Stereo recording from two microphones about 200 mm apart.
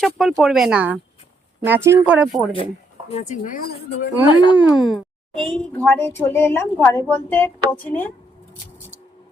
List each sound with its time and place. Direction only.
0.0 s speech: centre (ahead or behind)
3.1 s a woman's voice: 35° left (ahead or behind); by 4.1 s 55° left (ahead or behind)
4.3 s speech: 25° left (ahead or behind)
4.5 s a woman's voice: 5° right (ahead or behind); by 8.1 s 10° left (ahead or behind)